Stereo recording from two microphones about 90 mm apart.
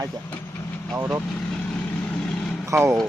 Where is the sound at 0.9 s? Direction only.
30° right (ahead or behind).